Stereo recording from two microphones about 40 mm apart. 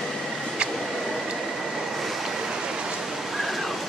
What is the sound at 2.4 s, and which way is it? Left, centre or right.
Rain, centre.